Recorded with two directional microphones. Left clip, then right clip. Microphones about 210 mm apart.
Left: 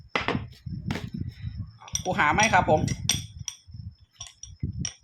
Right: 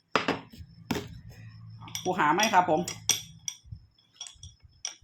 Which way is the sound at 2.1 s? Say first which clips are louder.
Left 2 dB; 45° left (ahead or behind).